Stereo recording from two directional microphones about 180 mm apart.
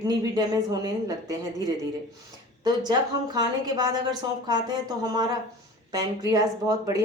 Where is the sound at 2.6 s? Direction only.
25° right (ahead or behind).